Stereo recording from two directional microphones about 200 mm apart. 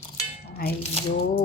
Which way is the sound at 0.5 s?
50° left (ahead or behind).